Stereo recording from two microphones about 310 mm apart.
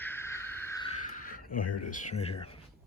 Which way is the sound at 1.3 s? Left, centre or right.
Left.